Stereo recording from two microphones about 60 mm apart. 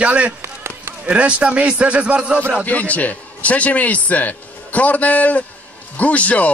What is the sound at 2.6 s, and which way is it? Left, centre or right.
A man's voice, left.